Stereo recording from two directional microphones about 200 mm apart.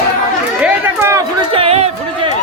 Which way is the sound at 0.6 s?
10° right (ahead or behind).